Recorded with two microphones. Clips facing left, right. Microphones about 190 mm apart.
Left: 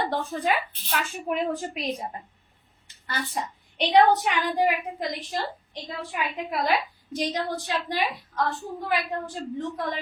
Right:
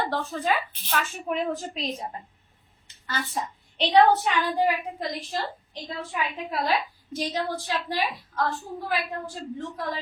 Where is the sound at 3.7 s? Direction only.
15° left (ahead or behind).